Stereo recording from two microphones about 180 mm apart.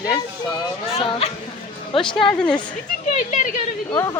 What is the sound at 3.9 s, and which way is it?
Speech, 20° left (ahead or behind).